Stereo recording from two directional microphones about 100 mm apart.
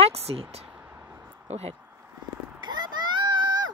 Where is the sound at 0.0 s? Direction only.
90° right.